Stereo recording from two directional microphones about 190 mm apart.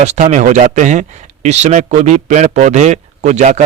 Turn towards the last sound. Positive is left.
turn(degrees=-35)  # may be behind; listen again after turning